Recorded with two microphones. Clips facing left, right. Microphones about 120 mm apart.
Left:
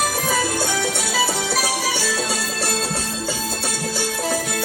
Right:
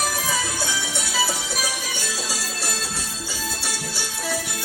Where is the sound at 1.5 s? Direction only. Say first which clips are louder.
Left 7 dB; 70° left (ahead or behind).